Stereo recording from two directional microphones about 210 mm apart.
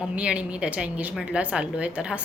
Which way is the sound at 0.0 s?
5° right (ahead or behind).